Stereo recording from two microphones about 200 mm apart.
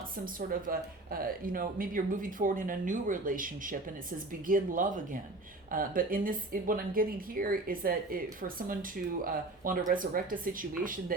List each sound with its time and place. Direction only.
0.3 s a woman's voice: 45° right (ahead or behind)